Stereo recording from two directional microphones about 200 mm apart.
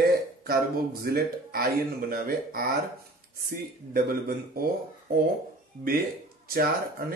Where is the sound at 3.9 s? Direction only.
50° right (ahead or behind).